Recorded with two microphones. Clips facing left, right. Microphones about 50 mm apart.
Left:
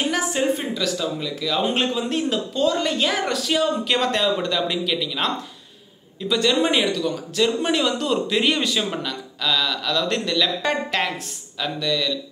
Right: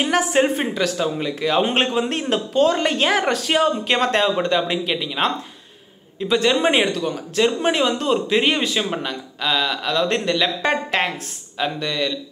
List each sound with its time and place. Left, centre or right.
0.0 s a man's voice: right